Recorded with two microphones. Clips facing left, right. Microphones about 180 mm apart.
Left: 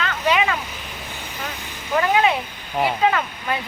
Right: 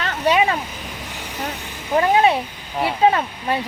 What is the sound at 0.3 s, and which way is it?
Speech, 30° right (ahead or behind).